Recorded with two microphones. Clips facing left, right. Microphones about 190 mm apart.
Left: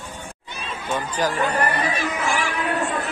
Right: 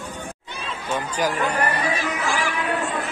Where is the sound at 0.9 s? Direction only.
10° right (ahead or behind).